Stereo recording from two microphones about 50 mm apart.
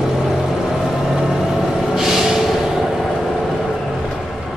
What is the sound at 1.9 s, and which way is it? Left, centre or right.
Snort, centre.